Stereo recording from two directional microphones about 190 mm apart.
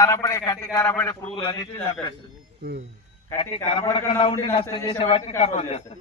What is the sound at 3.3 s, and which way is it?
A man's voice, 30° left (ahead or behind).